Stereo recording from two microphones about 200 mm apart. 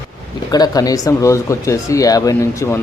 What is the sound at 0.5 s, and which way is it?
A man's voice, 20° left (ahead or behind).